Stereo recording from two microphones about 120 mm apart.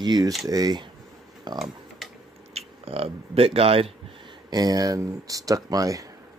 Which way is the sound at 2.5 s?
55° right (ahead or behind).